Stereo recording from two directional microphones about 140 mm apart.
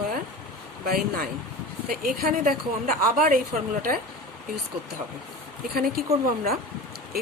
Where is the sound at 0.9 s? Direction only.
90° right.